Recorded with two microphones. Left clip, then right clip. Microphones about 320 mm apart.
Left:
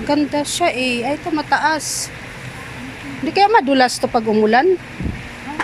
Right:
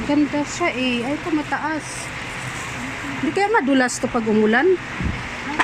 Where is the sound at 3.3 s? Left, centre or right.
Left.